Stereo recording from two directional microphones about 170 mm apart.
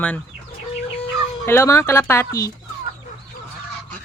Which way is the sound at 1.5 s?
15° left (ahead or behind).